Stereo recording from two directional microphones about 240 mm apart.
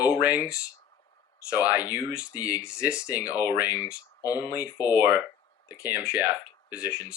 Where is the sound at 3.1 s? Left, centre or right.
Centre.